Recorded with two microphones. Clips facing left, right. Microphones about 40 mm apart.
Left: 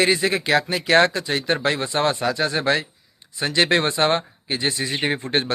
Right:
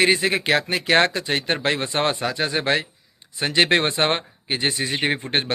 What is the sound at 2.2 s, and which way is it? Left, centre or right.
Speech, right.